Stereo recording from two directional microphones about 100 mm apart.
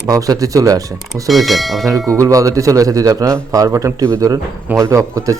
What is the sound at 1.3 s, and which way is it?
Speech, centre (ahead or behind).